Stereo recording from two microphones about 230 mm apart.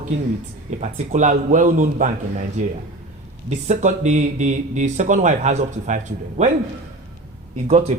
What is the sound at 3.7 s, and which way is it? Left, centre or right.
Speech, right.